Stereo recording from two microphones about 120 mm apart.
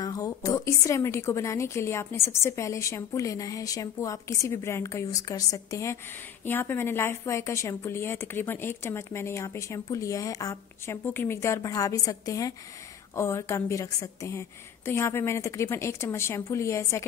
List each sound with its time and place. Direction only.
0.0 s a woman's voice: 30° left (ahead or behind)